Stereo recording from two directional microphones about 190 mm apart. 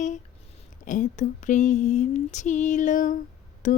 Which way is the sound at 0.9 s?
40° left (ahead or behind).